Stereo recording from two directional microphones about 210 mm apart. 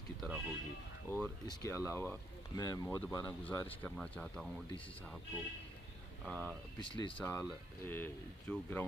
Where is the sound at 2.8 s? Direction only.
10° left (ahead or behind).